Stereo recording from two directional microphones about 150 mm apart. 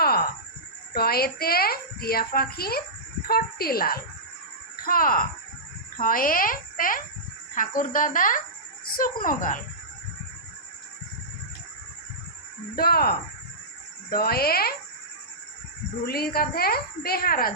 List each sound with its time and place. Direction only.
0.0 s a sound: 90° left
0.9 s a child's voice: 90° left
4.8 s speech: 75° left (ahead or behind)
12.7 s a child's voice: 90° left
16.0 s a child's voice: 90° left